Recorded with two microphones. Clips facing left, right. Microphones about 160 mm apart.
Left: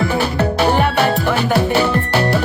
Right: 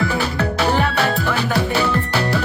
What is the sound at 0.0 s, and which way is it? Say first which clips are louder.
Music: left 3 dB; 30° left (ahead or behind).